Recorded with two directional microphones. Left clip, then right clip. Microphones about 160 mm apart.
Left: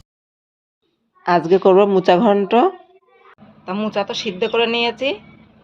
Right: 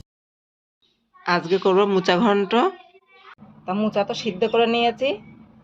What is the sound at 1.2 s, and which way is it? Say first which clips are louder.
A woman's voice: left 6 dB; 35° left (ahead or behind).